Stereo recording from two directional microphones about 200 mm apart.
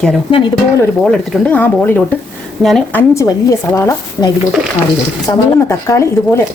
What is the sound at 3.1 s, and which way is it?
Speech, 15° left (ahead or behind).